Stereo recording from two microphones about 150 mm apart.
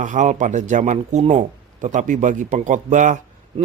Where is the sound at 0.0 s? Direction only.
55° right (ahead or behind).